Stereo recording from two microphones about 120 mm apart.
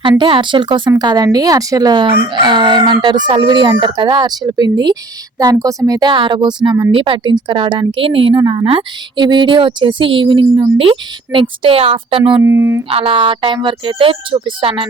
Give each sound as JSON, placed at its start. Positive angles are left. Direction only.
{"t": 0.0, "sound": "a woman's voice", "side_deg": -40}
{"t": 12.4, "sound": "speech", "side_deg": -20}
{"t": 12.9, "sound": "a woman's voice", "side_deg": -50}